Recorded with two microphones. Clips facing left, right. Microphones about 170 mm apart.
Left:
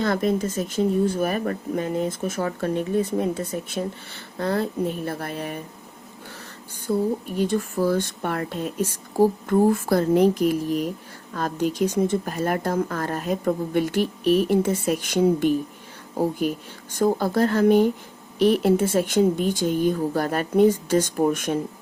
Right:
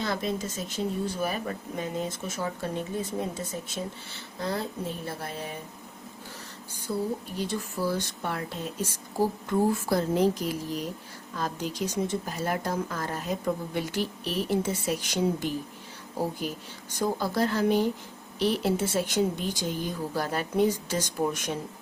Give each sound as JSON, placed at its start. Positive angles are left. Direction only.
{"t": 0.0, "sound": "speech", "side_deg": 55}
{"t": 6.9, "sound": "speech", "side_deg": 55}